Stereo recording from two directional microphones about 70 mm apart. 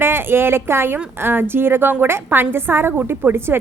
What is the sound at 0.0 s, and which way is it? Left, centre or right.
A woman's voice, right.